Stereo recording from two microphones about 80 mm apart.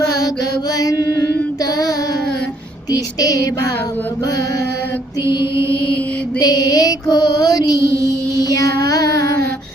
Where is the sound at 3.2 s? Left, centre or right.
Left.